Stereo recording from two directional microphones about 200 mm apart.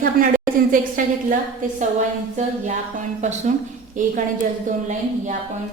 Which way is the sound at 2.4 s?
35° right (ahead or behind).